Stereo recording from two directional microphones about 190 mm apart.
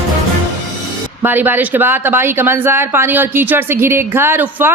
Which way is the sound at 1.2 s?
10° right (ahead or behind).